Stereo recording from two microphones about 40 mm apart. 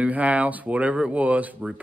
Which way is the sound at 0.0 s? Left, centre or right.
Right.